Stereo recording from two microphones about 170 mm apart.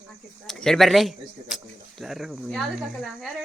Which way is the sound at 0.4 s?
Centre (ahead or behind).